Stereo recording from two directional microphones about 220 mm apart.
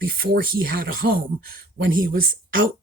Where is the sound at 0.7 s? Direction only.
40° right (ahead or behind).